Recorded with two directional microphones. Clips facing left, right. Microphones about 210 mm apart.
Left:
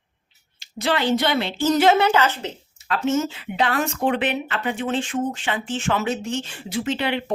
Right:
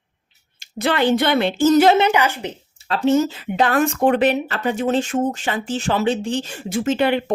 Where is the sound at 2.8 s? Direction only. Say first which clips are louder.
Right 5 dB; 30° right (ahead or behind).